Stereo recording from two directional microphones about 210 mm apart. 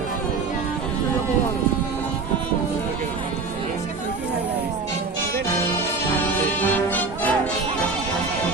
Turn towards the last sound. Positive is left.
turn(degrees=5)  # may be behind; listen again after turning